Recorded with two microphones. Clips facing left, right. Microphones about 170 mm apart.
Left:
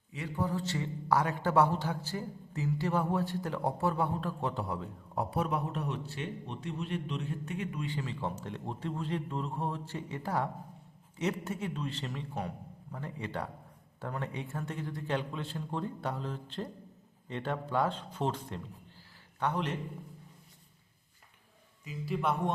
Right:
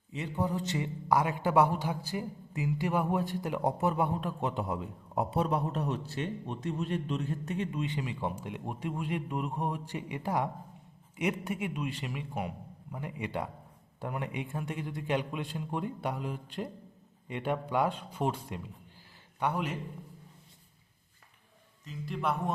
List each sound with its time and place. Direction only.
0.1 s a man's voice: 20° right (ahead or behind)
5.5 s a man's voice: 35° right (ahead or behind); by 19.7 s 10° right (ahead or behind)
21.8 s a man's voice: 5° left (ahead or behind)